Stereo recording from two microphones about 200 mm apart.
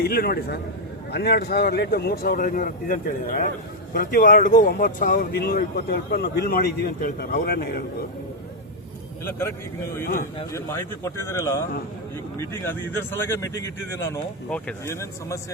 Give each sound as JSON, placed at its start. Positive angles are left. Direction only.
{"t": 0.0, "sound": "speech", "side_deg": 50}
{"t": 9.4, "sound": "speech", "side_deg": 10}